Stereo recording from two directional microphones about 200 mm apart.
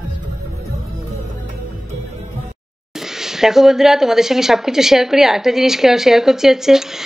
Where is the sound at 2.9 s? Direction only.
Centre (ahead or behind).